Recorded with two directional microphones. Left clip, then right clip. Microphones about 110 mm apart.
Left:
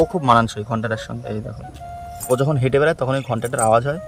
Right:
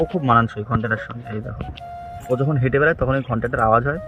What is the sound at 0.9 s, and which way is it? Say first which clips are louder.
Speech: right 1 dB; 35° left (ahead or behind).